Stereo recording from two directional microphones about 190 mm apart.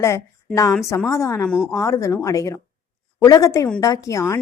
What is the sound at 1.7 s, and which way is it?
A woman's voice, 15° left (ahead or behind).